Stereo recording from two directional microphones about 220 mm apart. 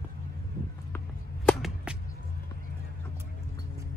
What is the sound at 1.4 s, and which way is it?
Whip, centre (ahead or behind).